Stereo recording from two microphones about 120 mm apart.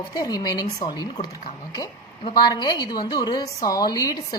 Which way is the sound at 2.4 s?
35° left (ahead or behind).